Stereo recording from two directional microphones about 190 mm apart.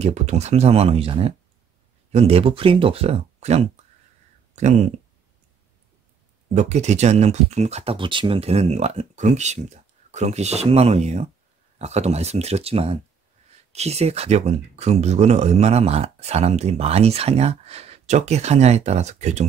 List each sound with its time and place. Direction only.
0.0 s speech: 35° right (ahead or behind)
6.5 s speech: 40° right (ahead or behind)